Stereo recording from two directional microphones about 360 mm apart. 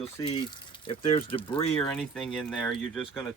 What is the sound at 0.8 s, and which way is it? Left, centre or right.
Speech, centre.